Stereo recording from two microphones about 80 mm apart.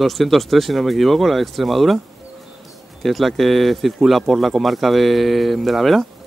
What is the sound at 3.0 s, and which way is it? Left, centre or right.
Speech, centre.